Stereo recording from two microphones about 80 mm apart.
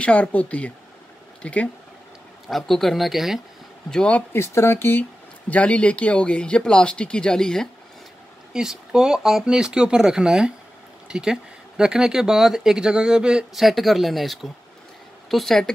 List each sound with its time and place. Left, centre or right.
0.0 s speech: centre
2.4 s speech: centre
3.9 s speech: centre
4.3 s speech: left
5.5 s speech: centre
8.5 s speech: centre